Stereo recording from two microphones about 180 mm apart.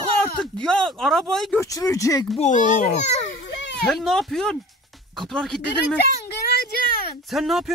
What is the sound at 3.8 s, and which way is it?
Speech, centre (ahead or behind).